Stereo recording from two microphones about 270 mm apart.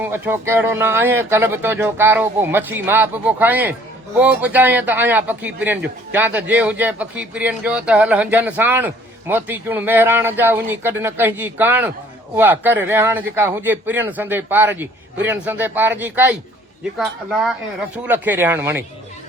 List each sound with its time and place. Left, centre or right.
0.0 s speech: centre